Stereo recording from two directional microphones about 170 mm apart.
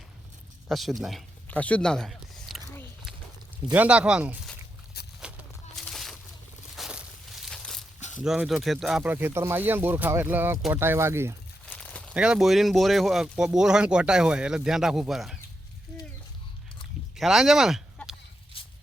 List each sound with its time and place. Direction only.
0.7 s speech: centre (ahead or behind)
3.7 s speech: 5° right (ahead or behind)
4.9 s a sound: 70° left (ahead or behind)
5.7 s a sound: 5° left (ahead or behind)
6.7 s walk: centre (ahead or behind)
7.5 s crumpling: centre (ahead or behind)
8.2 s speech: 5° right (ahead or behind)
11.6 s crumpling: 5° left (ahead or behind)
12.1 s speech: 5° right (ahead or behind)
17.2 s speech: centre (ahead or behind)